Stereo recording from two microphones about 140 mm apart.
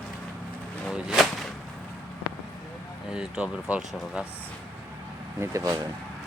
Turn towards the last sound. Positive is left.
turn(degrees=-25)  # may be behind; listen again after turning